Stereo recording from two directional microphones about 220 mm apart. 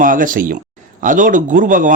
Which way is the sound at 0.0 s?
40° right (ahead or behind).